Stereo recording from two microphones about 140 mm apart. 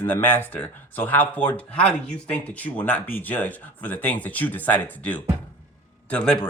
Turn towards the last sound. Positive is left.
turn(degrees=5)  # may be behind; listen again after turning